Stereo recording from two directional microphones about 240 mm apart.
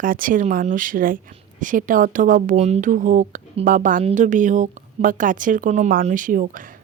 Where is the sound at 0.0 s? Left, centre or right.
Right.